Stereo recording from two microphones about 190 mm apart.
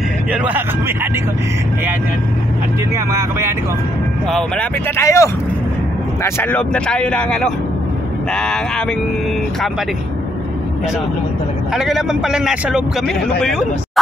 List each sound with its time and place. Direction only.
0.3 s speech: 5° right (ahead or behind)
3.1 s speech: 15° right (ahead or behind)
4.3 s a man's voice: centre (ahead or behind)
4.9 s a man's voice: 15° left (ahead or behind)
11.7 s a man's voice: 5° right (ahead or behind)